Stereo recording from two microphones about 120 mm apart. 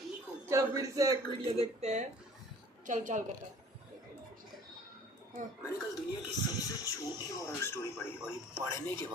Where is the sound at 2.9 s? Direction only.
90° right.